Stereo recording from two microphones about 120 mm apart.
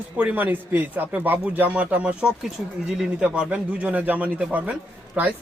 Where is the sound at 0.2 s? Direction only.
15° right (ahead or behind).